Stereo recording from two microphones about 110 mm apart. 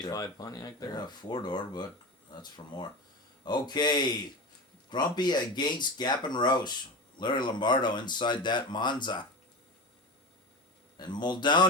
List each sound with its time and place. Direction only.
0.0 s speech: 35° left (ahead or behind)
10.9 s speech: 40° left (ahead or behind)